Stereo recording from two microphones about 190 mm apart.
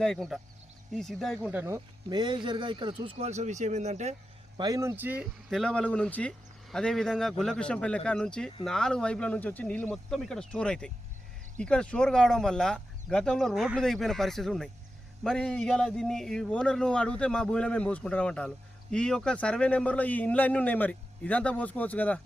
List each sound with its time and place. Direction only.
0.0 s a man's voice: 5° left (ahead or behind)
1.4 s speech: 10° right (ahead or behind); by 4.1 s 35° right (ahead or behind)
4.5 s a man's voice: 20° right (ahead or behind); by 22.2 s 10° left (ahead or behind)